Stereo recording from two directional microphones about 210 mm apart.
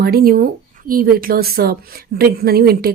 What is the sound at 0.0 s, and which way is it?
Speech, 45° right (ahead or behind).